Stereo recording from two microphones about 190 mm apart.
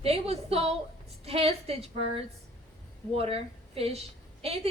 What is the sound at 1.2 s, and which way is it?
A woman's voice, 30° right (ahead or behind).